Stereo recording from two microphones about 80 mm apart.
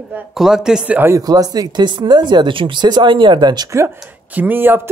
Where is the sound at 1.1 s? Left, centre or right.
Right.